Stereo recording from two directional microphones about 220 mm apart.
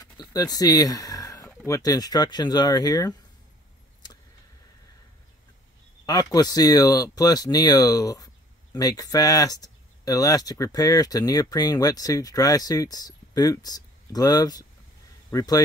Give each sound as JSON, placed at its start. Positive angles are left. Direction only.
{"t": 0.0, "sound": "a sound", "side_deg": 15}
{"t": 1.7, "sound": "speech", "side_deg": 15}
{"t": 6.0, "sound": "speech", "side_deg": 15}